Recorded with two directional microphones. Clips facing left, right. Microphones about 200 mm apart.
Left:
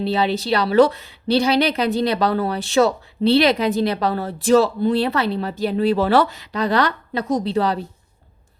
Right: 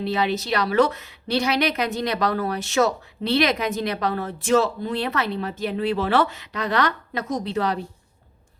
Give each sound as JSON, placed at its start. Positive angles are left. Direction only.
{"t": 0.0, "sound": "a woman's voice", "side_deg": 30}